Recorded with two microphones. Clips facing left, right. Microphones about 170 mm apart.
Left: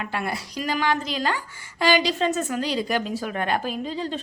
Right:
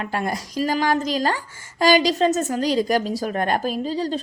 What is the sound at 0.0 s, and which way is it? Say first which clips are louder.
A woman's voice: right 3 dB; 40° right (ahead or behind).